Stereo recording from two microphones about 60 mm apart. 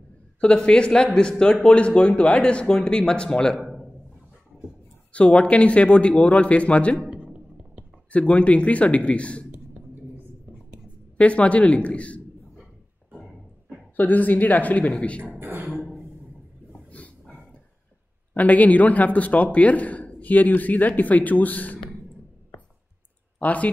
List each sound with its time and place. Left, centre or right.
0.4 s speech: centre
5.1 s a man's voice: centre
7.1 s music: centre
8.1 s a man's voice: left
11.1 s a man's voice: left
13.1 s a sound: centre
13.9 s a man's voice: left
15.3 s beatboxing: right
16.9 s dog: left
18.3 s a man's voice: left
23.4 s a man's voice: left